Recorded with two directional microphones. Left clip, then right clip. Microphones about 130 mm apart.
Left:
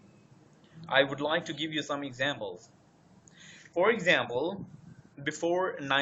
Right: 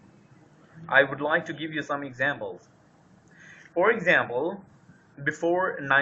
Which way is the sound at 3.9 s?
20° left (ahead or behind).